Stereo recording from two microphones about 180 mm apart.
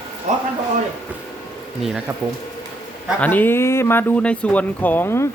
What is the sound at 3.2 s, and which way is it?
Speech, 10° left (ahead or behind).